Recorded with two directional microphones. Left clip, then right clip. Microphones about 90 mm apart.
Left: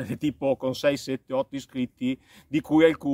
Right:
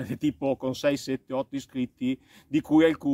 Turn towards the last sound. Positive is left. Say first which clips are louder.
# left 1 dB
turn(degrees=35)  # may be behind; listen again after turning